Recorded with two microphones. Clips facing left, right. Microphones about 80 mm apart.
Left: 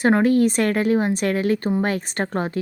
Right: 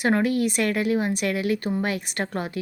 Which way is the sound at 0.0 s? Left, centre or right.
Left.